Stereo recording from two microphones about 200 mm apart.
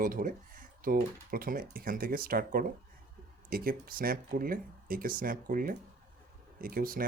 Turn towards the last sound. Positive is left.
turn(degrees=-45)  # may be behind; listen again after turning